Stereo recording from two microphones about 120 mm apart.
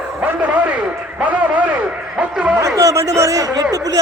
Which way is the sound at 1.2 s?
10° right (ahead or behind).